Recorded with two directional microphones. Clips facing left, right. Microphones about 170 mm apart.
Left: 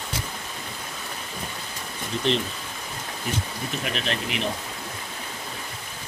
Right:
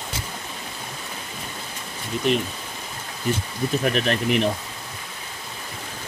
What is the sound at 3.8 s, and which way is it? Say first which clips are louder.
Speech: right 6 dB; 50° right (ahead or behind).